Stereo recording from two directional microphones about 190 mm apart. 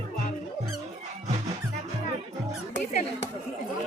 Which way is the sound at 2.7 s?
40° left (ahead or behind).